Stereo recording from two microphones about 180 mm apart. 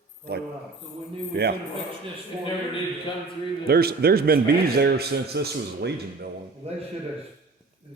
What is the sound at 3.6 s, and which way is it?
A man's voice, 60° right (ahead or behind).